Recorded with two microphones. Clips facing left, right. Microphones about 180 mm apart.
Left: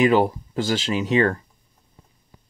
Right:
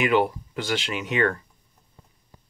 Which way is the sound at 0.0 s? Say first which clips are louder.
Left 4 dB; 40° left (ahead or behind).